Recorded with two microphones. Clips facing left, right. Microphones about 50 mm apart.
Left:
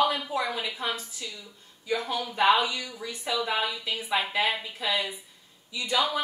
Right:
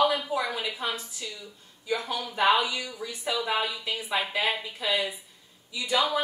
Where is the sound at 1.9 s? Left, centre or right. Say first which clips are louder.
Left 1 dB; centre.